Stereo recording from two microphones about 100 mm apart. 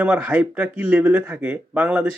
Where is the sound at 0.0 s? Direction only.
15° right (ahead or behind).